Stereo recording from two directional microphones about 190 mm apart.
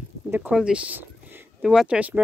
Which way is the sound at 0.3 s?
5° right (ahead or behind).